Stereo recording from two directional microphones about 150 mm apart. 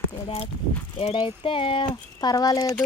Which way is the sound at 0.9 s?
35° left (ahead or behind).